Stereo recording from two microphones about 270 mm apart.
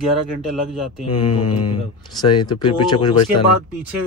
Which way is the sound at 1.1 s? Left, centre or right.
Centre.